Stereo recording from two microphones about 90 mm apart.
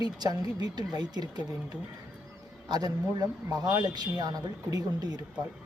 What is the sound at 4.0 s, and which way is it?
Speech, 50° right (ahead or behind).